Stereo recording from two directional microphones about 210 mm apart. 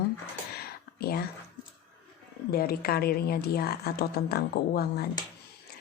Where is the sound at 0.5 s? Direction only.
50° left (ahead or behind).